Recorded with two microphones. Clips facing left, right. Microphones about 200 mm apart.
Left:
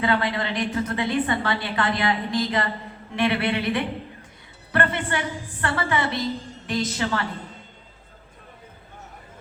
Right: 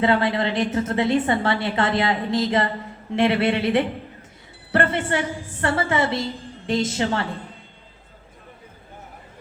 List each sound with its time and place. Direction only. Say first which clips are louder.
0.0 s a woman's voice: right 4 dB; 25° right (ahead or behind)